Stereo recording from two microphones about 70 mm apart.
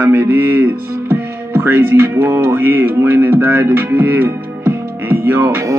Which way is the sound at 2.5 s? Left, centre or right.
Right.